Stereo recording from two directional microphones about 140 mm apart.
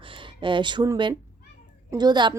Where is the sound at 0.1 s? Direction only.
35° right (ahead or behind).